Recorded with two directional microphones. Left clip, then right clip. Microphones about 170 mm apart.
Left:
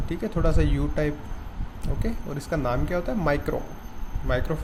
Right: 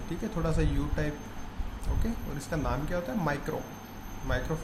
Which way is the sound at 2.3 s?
35° left (ahead or behind).